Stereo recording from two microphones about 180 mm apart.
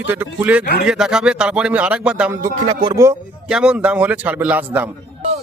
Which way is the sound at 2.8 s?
20° right (ahead or behind).